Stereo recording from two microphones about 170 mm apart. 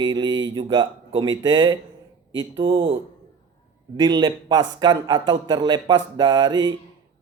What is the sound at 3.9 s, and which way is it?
Speech, 25° right (ahead or behind).